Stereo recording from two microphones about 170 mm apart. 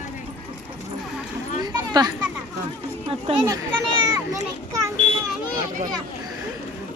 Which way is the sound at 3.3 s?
40° right (ahead or behind).